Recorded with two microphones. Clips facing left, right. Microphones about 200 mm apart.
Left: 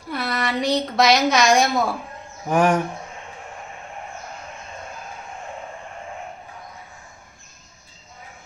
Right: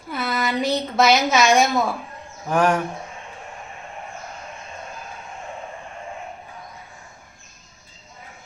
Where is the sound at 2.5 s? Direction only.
15° left (ahead or behind).